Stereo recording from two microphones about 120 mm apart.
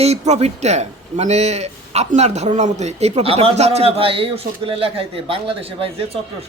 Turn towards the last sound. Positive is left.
turn(degrees=-50)  # may be behind; listen again after turning